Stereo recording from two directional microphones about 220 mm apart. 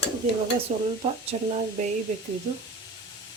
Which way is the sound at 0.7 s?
30° right (ahead or behind).